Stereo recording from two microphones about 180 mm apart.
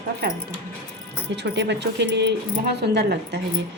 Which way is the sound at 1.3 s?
75° right (ahead or behind).